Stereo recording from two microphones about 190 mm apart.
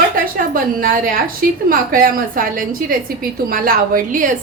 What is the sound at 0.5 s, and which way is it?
A woman's voice, 45° right (ahead or behind).